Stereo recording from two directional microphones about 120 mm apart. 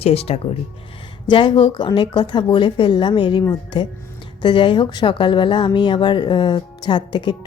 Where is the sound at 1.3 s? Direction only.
45° left (ahead or behind).